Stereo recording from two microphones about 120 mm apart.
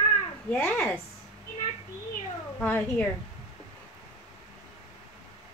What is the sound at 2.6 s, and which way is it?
Speech, 10° left (ahead or behind).